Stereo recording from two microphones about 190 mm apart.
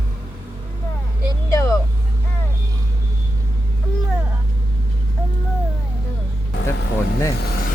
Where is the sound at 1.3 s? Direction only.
15° left (ahead or behind).